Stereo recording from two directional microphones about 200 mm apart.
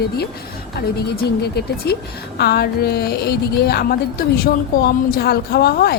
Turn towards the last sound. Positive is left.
turn(degrees=50)  # may be behind; listen again after turning